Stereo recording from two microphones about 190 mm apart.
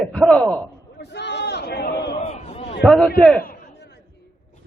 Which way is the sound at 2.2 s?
35° left (ahead or behind).